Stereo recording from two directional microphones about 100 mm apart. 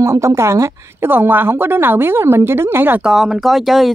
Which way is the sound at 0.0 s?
30° right (ahead or behind).